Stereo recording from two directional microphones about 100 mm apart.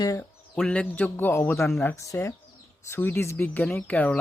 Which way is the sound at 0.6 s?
10° left (ahead or behind).